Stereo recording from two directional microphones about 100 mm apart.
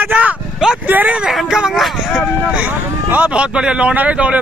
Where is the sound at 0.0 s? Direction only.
15° right (ahead or behind).